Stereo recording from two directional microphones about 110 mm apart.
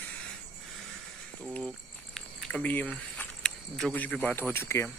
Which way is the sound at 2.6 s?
15° left (ahead or behind).